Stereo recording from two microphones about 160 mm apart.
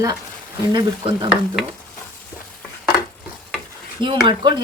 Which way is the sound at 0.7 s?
30° right (ahead or behind).